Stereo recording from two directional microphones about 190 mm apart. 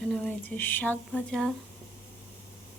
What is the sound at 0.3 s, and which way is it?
Speech, 10° left (ahead or behind).